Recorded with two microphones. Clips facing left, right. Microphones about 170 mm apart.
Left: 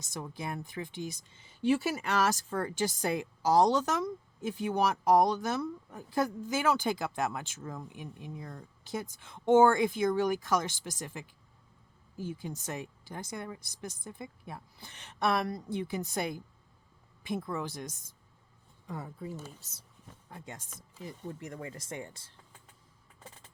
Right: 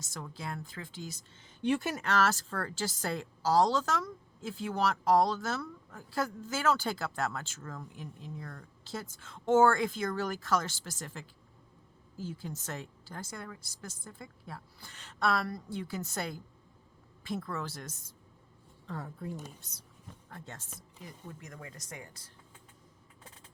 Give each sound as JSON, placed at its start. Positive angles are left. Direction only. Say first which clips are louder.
{"t": 0.1, "sound": "speech", "louder": "left 3 dB", "side_deg": 20}
{"t": 21.0, "sound": "speech", "louder": "left 7 dB", "side_deg": 30}